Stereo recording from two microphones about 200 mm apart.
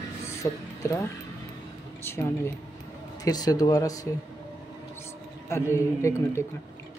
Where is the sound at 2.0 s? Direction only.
10° left (ahead or behind).